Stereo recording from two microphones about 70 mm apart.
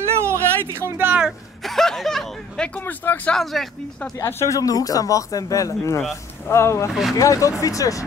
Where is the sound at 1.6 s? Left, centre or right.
Centre.